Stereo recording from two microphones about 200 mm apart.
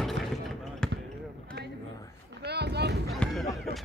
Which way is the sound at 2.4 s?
55° right (ahead or behind).